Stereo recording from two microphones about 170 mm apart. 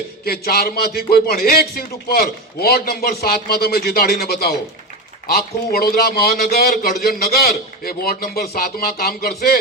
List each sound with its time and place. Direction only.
0.3 s a man's voice: 65° left (ahead or behind)